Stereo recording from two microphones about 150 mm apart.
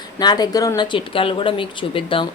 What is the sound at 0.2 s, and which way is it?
A woman's voice, 25° left (ahead or behind).